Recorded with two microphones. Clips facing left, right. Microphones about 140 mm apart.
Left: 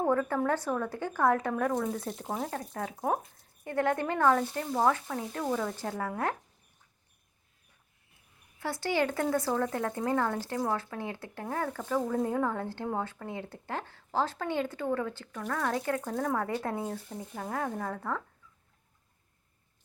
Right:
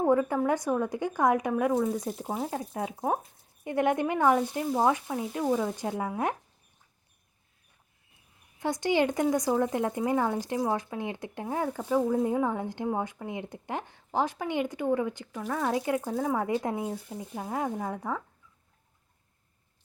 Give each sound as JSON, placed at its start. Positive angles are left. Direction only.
{"t": 0.0, "sound": "speech", "side_deg": -15}
{"t": 8.5, "sound": "speech", "side_deg": -20}